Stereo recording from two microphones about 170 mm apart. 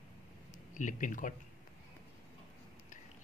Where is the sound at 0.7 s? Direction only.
50° left (ahead or behind).